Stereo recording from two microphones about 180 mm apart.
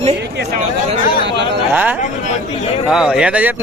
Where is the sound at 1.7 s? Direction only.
10° right (ahead or behind).